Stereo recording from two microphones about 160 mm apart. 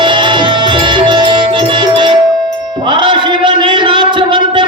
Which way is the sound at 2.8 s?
30° right (ahead or behind).